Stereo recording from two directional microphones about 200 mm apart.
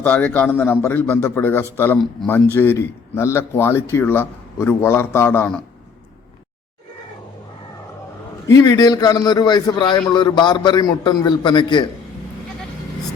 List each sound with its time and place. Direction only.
0.0 s a man's voice: 10° left (ahead or behind)
8.4 s a man's voice: 15° left (ahead or behind)